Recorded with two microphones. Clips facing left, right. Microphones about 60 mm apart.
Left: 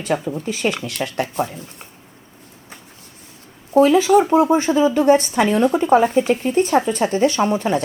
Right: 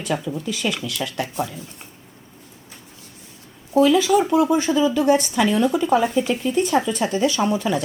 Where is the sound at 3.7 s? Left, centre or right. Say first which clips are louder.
Left 3 dB; left.